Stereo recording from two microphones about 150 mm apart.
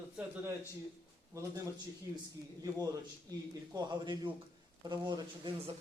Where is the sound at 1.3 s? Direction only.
20° right (ahead or behind).